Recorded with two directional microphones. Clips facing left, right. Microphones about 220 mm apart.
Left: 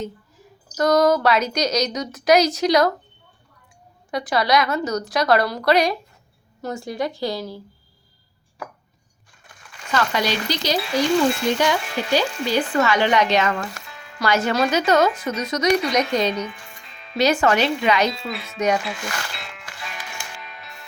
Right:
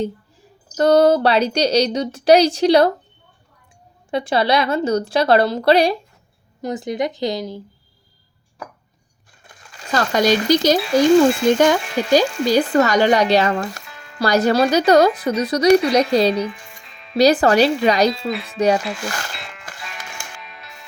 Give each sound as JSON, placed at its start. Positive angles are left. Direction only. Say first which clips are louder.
{"t": 0.0, "sound": "speech", "louder": "right 7 dB", "side_deg": -30}
{"t": 4.1, "sound": "a woman's voice", "louder": "right 2 dB", "side_deg": -25}
{"t": 6.6, "sound": "a woman's voice", "louder": "right 4 dB", "side_deg": -20}
{"t": 9.7, "sound": "speech", "louder": "right 4 dB", "side_deg": -40}
{"t": 13.8, "sound": "music", "louder": "even", "side_deg": 0}
{"t": 14.2, "sound": "speech", "louder": "right 5 dB", "side_deg": -35}
{"t": 16.5, "sound": "music", "louder": "right 5 dB", "side_deg": 0}
{"t": 17.2, "sound": "speech", "louder": "right 5 dB", "side_deg": -35}
{"t": 18.1, "sound": "speech", "louder": "right 6 dB", "side_deg": 0}
{"t": 19.3, "sound": "music", "louder": "right 2 dB", "side_deg": 0}